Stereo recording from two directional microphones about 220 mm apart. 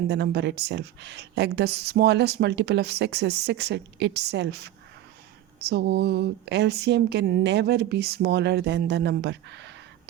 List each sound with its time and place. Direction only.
0.1 s a woman's voice: 50° right (ahead or behind)